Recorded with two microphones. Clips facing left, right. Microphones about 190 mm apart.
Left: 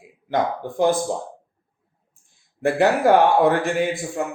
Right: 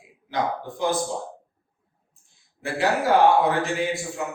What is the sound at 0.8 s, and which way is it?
Speech, 55° left (ahead or behind).